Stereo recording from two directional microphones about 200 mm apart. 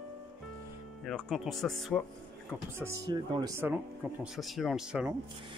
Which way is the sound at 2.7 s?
15° right (ahead or behind).